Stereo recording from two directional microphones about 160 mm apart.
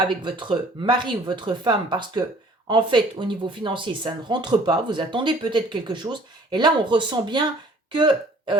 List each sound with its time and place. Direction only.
0.0 s speech: 30° right (ahead or behind)